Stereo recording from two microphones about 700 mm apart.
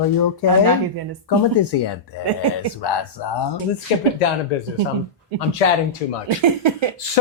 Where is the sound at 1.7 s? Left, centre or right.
Left.